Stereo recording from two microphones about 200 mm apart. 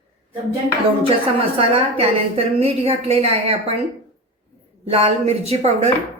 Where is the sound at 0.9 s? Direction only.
30° right (ahead or behind).